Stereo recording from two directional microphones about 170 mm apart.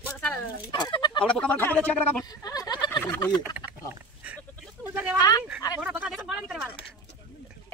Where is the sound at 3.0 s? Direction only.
15° left (ahead or behind).